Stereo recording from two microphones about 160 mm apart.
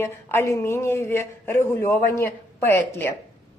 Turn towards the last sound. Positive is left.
turn(degrees=15)  # may be behind; listen again after turning